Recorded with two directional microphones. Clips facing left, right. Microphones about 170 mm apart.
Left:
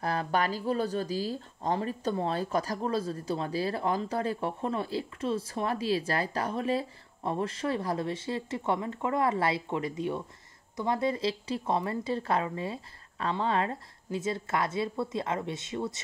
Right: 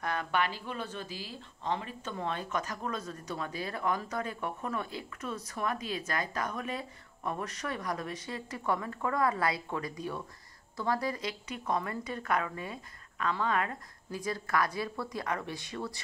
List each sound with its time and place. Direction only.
0.0 s speech: 35° left (ahead or behind)